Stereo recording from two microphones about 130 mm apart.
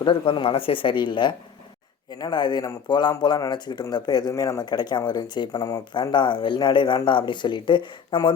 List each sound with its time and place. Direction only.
0.0 s speech: 40° left (ahead or behind)